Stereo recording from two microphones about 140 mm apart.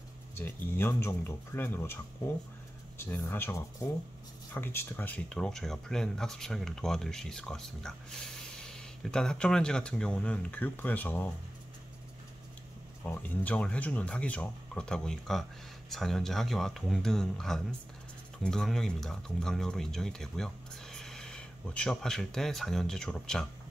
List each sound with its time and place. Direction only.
0.4 s speech: 15° left (ahead or behind)
3.0 s speech: 15° left (ahead or behind)
13.0 s speech: 10° left (ahead or behind)